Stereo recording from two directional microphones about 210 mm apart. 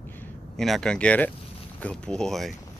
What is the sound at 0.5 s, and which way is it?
Speech, centre (ahead or behind).